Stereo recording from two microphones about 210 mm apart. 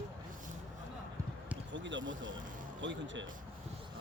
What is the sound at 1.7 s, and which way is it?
Speech, 60° right (ahead or behind).